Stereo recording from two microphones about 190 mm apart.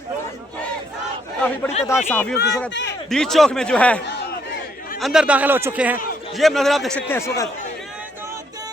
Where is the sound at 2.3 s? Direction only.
60° left (ahead or behind).